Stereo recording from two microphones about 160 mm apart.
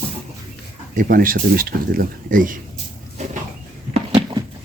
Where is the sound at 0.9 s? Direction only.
60° right (ahead or behind).